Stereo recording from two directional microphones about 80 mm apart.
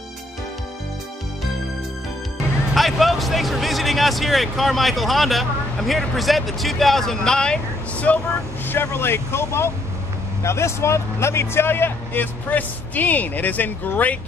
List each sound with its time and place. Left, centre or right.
2.7 s speech: centre
8.6 s speech: left